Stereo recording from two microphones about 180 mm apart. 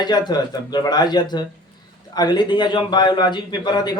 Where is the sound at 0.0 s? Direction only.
25° left (ahead or behind).